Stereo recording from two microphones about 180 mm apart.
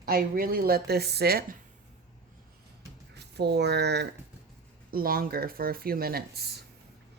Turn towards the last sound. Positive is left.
turn(degrees=-65)  # may be behind; listen again after turning